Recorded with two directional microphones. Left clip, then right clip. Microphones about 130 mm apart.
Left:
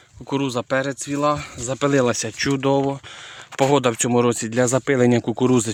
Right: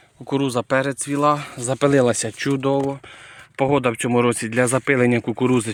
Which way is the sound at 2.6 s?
10° left (ahead or behind).